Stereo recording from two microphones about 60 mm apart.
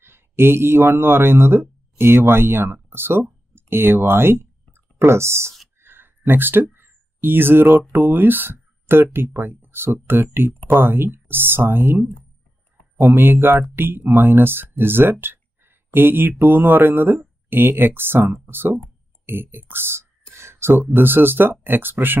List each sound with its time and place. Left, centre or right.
0.0 s speech: right
5.8 s a sound: right
7.9 s speech: right
13.1 s speech: right
20.2 s a sound: right
20.7 s speech: right